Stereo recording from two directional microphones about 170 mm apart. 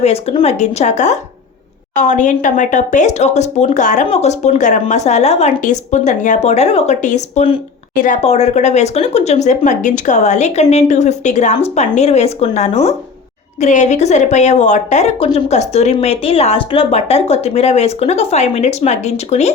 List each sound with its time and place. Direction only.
0.0 s a woman's voice: 35° left (ahead or behind)